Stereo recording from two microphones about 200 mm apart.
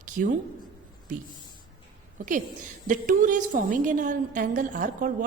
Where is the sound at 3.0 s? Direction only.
40° right (ahead or behind).